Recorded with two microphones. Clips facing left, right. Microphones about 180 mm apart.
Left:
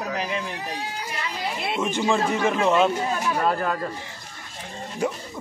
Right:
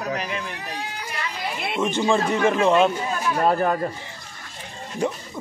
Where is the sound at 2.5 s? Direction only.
Centre (ahead or behind).